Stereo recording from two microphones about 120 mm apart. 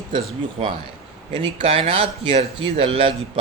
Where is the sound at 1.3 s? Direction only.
50° right (ahead or behind).